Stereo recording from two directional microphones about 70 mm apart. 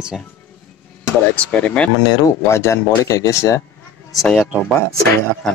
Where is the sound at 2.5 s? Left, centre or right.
Left.